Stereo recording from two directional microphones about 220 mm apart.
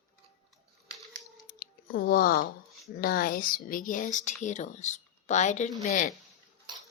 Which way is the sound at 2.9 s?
40° left (ahead or behind).